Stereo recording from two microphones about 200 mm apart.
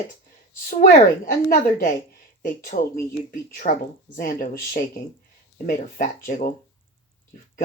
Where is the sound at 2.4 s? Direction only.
40° left (ahead or behind).